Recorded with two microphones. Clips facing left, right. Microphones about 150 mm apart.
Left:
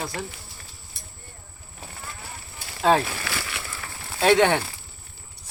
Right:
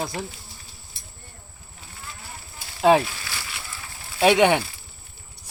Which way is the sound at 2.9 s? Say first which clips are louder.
Right 2 dB; 15° right (ahead or behind).